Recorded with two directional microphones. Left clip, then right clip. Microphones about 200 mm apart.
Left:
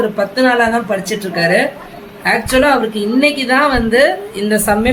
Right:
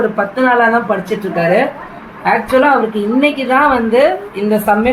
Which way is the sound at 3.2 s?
10° left (ahead or behind).